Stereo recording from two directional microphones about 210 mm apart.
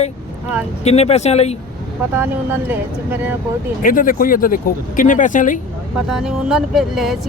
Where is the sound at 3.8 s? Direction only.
40° left (ahead or behind).